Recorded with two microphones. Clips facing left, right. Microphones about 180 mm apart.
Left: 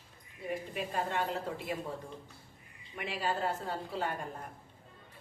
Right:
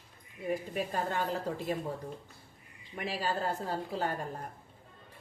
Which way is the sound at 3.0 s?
35° right (ahead or behind).